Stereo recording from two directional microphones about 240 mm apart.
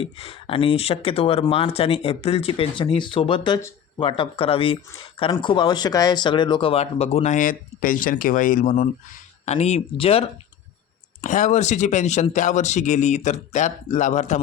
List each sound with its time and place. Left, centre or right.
0.0 s speech: left